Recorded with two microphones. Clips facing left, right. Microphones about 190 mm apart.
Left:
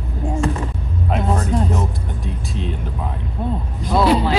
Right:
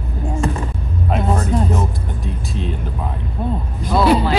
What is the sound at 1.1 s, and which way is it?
Speech, centre (ahead or behind).